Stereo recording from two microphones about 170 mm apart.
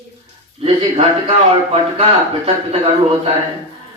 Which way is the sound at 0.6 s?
35° right (ahead or behind).